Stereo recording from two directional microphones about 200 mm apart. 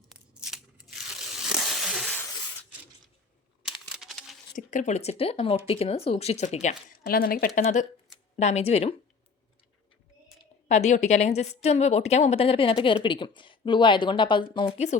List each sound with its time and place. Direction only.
1.4 s a sound: centre (ahead or behind)
3.6 s a sound: 5° right (ahead or behind)
4.5 s speech: 40° left (ahead or behind)
7.0 s speech: 50° left (ahead or behind)
7.6 s speech: 35° left (ahead or behind)
10.7 s a woman's voice: 35° left (ahead or behind)